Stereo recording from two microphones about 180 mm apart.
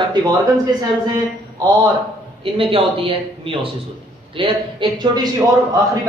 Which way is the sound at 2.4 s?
30° right (ahead or behind).